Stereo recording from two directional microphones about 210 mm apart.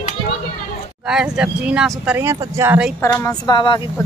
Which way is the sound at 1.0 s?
5° right (ahead or behind).